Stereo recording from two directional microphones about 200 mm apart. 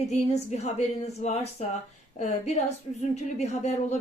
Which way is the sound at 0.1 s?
35° left (ahead or behind).